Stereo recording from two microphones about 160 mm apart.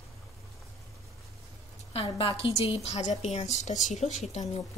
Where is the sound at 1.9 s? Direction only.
35° left (ahead or behind).